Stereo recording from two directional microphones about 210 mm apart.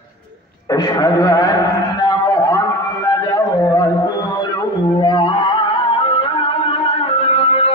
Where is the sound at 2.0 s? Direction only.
15° left (ahead or behind).